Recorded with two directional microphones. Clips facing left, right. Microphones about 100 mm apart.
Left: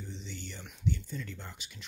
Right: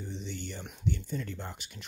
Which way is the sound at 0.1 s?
60° right (ahead or behind).